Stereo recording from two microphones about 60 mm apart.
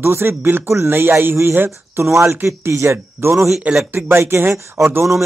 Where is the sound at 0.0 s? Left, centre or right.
Right.